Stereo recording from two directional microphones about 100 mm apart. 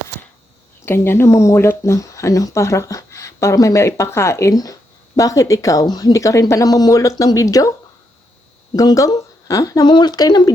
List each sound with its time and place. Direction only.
0.9 s speech: 25° left (ahead or behind)
8.7 s speech: 40° left (ahead or behind)